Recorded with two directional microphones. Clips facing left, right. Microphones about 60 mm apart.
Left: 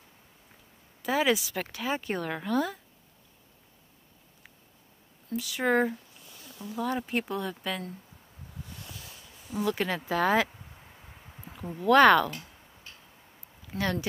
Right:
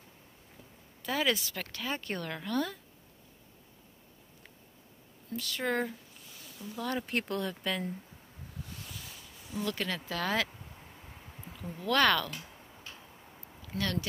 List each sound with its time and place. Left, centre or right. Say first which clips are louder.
1.0 s speech: left 5 dB; centre
5.3 s speech: left 6 dB; centre
9.5 s speech: left 5 dB; centre
10.7 s a sound: even; centre; by 12.3 s left
13.7 s speech: left 3 dB; centre